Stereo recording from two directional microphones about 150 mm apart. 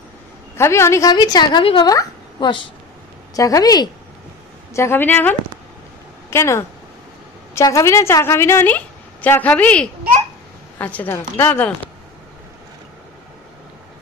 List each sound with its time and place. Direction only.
0.6 s a woman's voice: 20° left (ahead or behind)
6.3 s a woman's voice: 20° left (ahead or behind)